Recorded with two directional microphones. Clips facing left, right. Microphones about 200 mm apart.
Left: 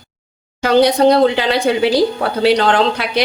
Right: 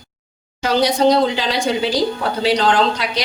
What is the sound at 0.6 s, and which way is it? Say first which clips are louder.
A woman's voice: left 4 dB; 60° left (ahead or behind).